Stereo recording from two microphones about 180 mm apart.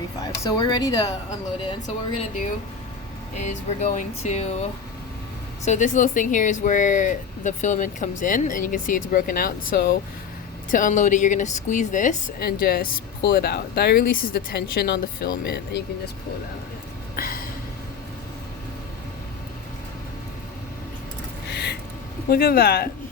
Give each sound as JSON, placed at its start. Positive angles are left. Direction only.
{"t": 0.2, "sound": "speech", "side_deg": 20}
{"t": 3.3, "sound": "speech", "side_deg": 40}
{"t": 5.6, "sound": "speech", "side_deg": 45}
{"t": 10.7, "sound": "speech", "side_deg": 45}
{"t": 17.2, "sound": "a sound", "side_deg": 55}
{"t": 21.5, "sound": "a sound", "side_deg": 65}
{"t": 22.3, "sound": "speech", "side_deg": 60}